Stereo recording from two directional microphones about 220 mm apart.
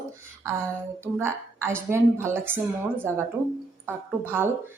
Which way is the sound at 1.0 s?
10° right (ahead or behind).